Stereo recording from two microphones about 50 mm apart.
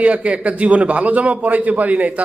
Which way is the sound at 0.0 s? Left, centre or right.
Right.